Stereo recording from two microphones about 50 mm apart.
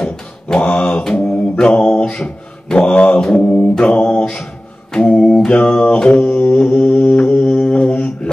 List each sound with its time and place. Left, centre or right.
0.0 s a sound: centre
1.0 s mantra: centre
4.2 s mantra: centre
5.4 s music: centre